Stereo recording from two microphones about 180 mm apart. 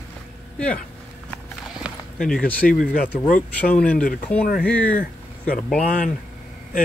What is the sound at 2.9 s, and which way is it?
Speech, 50° left (ahead or behind).